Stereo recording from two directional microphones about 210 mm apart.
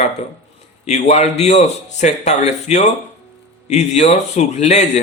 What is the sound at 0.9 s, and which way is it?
Speech, 30° left (ahead or behind).